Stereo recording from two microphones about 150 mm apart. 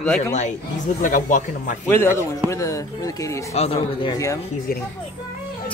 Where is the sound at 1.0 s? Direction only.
60° left (ahead or behind).